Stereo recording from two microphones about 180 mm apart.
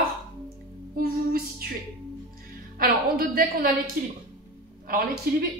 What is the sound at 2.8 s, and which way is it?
A woman's voice, 55° right (ahead or behind).